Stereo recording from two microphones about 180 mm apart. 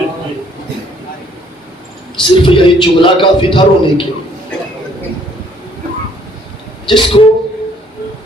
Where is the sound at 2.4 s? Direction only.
25° left (ahead or behind).